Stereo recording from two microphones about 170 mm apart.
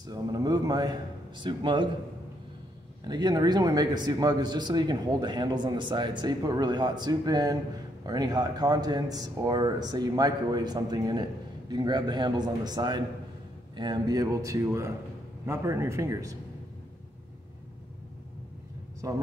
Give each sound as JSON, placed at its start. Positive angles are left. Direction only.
{"t": 0.0, "sound": "a man's voice", "side_deg": -25}
{"t": 3.0, "sound": "a man's voice", "side_deg": -25}
{"t": 18.9, "sound": "speech", "side_deg": -20}